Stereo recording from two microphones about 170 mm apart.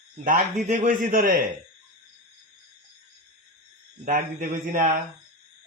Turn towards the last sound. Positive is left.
turn(degrees=-55)  # may be behind; listen again after turning